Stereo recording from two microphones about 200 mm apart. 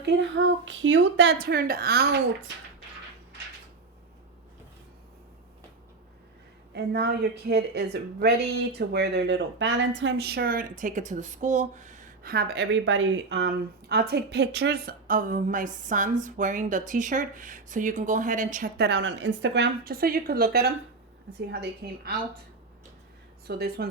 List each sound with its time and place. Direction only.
0.0 s a woman's voice: 60° right (ahead or behind)
6.7 s a woman's voice: 55° right (ahead or behind)
23.5 s a woman's voice: 55° right (ahead or behind)